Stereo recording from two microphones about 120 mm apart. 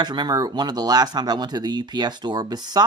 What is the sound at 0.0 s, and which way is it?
Speech, 35° right (ahead or behind).